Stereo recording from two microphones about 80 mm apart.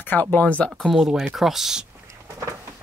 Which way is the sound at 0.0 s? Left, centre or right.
Left.